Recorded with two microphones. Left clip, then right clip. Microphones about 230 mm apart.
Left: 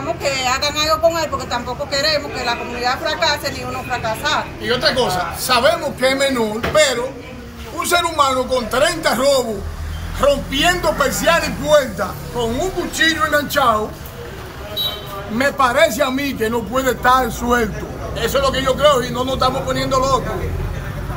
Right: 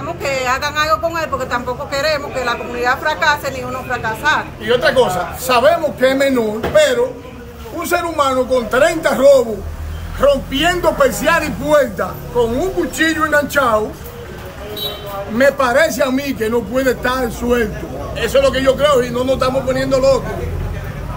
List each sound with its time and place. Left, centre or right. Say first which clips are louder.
0.2 s speech: right 2 dB; centre
4.9 s a man's voice: right 4 dB; right
5.5 s a man's voice: right 3 dB; centre
13.3 s speech: right 1 dB; centre
15.3 s a man's voice: right 3 dB; centre